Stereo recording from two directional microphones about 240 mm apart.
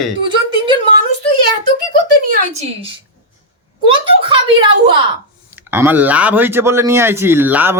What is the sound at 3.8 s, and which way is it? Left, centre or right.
Speech, right.